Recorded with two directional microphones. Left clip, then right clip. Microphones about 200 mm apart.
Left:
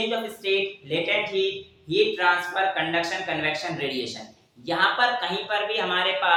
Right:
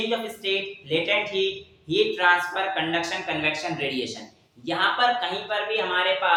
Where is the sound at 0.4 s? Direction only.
Centre (ahead or behind).